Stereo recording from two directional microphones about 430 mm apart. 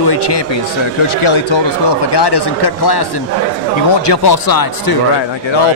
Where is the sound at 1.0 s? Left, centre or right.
Left.